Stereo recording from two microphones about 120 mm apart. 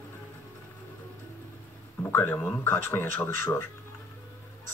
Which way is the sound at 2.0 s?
15° left (ahead or behind).